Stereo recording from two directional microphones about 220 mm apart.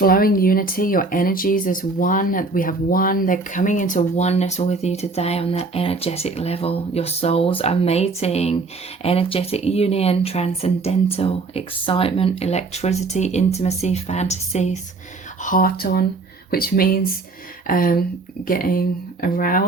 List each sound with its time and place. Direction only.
0.0 s speech: 40° left (ahead or behind)